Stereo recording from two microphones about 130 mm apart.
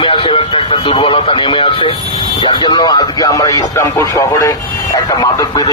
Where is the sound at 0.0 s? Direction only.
40° left (ahead or behind).